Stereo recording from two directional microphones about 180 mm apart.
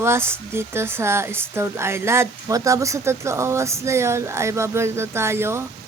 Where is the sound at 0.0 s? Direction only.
15° right (ahead or behind).